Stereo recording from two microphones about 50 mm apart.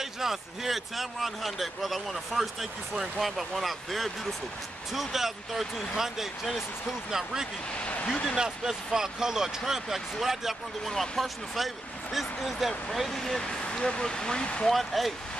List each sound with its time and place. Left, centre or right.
0.0 s speech: centre
7.8 s a sound: left
8.4 s speech: centre
14.7 s speech: centre